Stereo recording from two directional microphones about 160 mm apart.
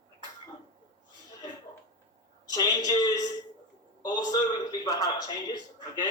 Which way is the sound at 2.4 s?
25° left (ahead or behind).